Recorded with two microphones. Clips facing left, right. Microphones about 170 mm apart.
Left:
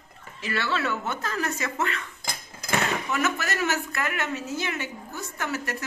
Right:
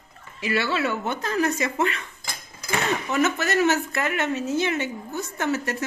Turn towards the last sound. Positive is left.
turn(degrees=-25)  # may be behind; listen again after turning